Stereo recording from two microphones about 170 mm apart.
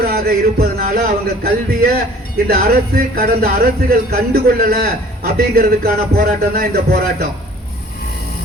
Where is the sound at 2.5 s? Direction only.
60° right (ahead or behind).